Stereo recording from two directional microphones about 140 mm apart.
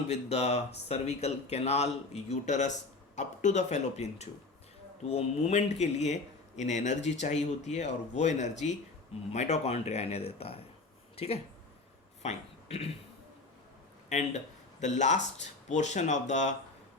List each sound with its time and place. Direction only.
0.1 s speech: 50° left (ahead or behind)
12.2 s speech: 50° left (ahead or behind)
14.1 s speech: 55° left (ahead or behind)